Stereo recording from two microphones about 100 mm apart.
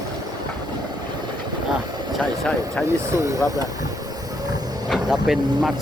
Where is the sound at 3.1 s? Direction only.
30° right (ahead or behind).